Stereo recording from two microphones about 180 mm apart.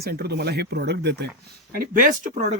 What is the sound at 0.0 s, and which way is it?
Speech, 60° right (ahead or behind).